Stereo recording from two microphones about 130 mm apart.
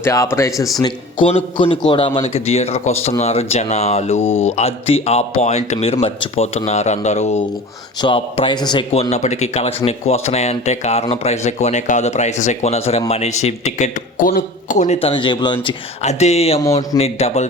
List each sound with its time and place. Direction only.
0.0 s speech: 25° left (ahead or behind)
0.8 s a man's voice: 35° left (ahead or behind); by 4.2 s 55° left (ahead or behind)
4.2 s speech: 20° left (ahead or behind)
4.4 s speech: 55° left (ahead or behind)
8.0 s a man's voice: 40° left (ahead or behind)
8.9 s speech: 55° left (ahead or behind); by 15.7 s 35° left (ahead or behind)
16.0 s speech: 60° left (ahead or behind)